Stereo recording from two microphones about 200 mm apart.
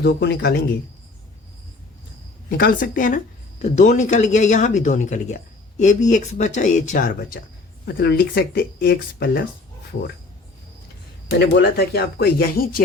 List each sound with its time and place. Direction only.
0.0 s speech: 55° left (ahead or behind)
2.5 s speech: 50° left (ahead or behind)
11.3 s speech: 55° left (ahead or behind)